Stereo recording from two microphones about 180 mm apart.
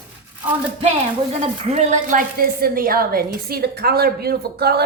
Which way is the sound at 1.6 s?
40° right (ahead or behind).